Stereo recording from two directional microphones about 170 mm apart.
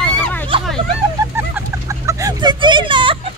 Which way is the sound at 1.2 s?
20° right (ahead or behind).